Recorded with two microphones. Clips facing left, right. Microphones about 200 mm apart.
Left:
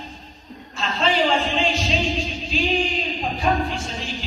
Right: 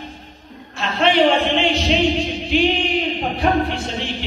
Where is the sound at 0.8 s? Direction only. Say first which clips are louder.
Right 5 dB; 65° right (ahead or behind).